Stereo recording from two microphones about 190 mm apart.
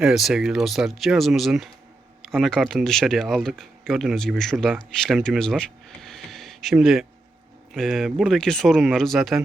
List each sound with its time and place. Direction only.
0.0 s speech: centre (ahead or behind)